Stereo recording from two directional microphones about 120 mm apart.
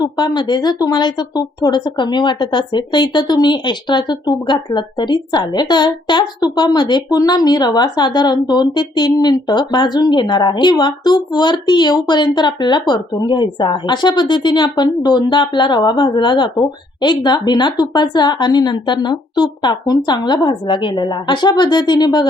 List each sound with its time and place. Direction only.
0.0 s a woman's voice: 35° left (ahead or behind)